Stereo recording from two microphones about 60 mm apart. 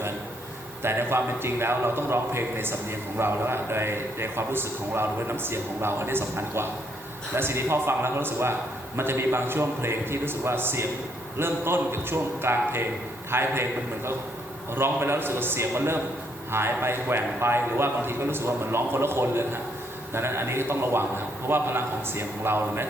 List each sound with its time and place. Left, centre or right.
0.8 s a man's voice: right